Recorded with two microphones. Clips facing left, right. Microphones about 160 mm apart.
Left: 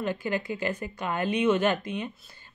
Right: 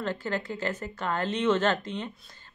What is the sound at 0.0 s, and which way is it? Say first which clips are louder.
Speech: left 2 dB; 15° left (ahead or behind).